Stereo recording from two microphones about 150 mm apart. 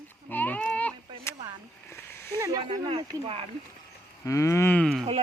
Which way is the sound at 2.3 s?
20° right (ahead or behind).